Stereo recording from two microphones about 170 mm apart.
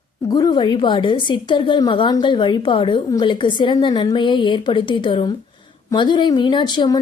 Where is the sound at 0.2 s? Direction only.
20° left (ahead or behind).